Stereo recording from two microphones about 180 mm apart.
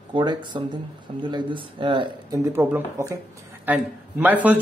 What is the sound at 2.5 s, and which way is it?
Speech, 10° right (ahead or behind).